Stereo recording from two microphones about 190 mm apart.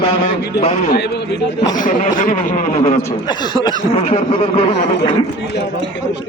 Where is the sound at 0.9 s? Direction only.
60° left (ahead or behind).